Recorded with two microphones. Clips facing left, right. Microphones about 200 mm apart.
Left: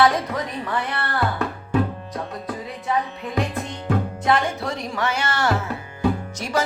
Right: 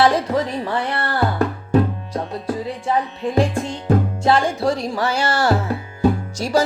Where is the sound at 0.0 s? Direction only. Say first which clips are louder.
Right 3 dB; 30° right (ahead or behind).